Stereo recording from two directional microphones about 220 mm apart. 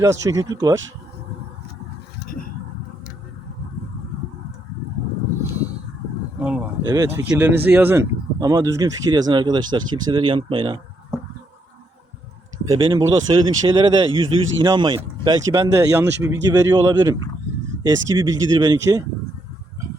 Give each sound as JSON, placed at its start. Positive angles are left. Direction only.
{"t": 0.0, "sound": "speech", "side_deg": -15}
{"t": 2.1, "sound": "vehicle", "side_deg": 40}
{"t": 6.4, "sound": "speech", "side_deg": -5}
{"t": 12.6, "sound": "speech", "side_deg": -15}